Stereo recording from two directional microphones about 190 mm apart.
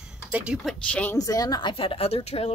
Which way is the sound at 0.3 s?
5° right (ahead or behind).